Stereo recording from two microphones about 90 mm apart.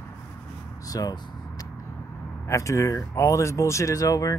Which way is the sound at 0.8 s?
45° left (ahead or behind).